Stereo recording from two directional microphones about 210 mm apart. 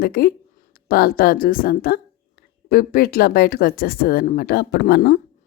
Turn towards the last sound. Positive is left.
turn(degrees=50)  # may be behind; listen again after turning